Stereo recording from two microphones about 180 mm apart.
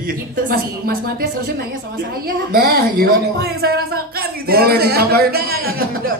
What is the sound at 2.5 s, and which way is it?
A woman's voice, 55° right (ahead or behind).